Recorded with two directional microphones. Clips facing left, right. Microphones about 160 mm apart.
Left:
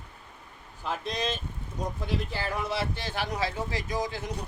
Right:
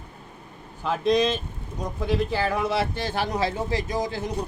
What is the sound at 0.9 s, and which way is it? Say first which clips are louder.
Speech: right 10 dB; 90° right.